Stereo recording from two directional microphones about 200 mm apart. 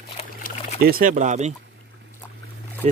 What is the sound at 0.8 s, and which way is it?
Speech, 45° right (ahead or behind).